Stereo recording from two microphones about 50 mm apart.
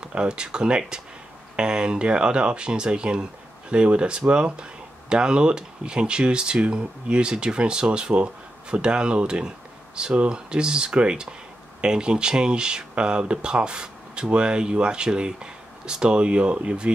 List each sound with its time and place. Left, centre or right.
0.0 s speech: centre